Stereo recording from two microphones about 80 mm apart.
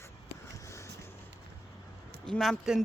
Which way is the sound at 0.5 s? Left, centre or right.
Left.